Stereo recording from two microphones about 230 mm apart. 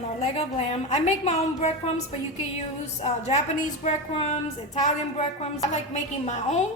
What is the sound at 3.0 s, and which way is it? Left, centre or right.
A woman's voice, left.